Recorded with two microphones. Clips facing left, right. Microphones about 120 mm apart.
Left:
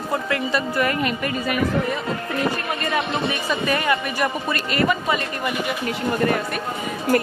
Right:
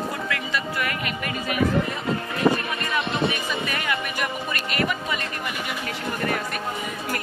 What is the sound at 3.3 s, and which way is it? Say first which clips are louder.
Speech: left 5 dB; 35° left (ahead or behind).